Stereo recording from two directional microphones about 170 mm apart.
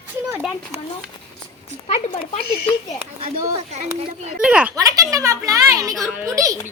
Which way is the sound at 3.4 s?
45° right (ahead or behind).